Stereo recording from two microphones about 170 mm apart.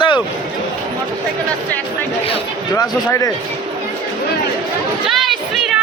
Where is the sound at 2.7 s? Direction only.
20° left (ahead or behind).